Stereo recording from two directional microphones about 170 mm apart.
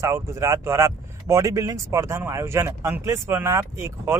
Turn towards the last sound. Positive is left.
turn(degrees=-15)  # may be behind; listen again after turning